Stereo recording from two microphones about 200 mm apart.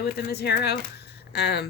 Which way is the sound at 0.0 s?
55° left (ahead or behind).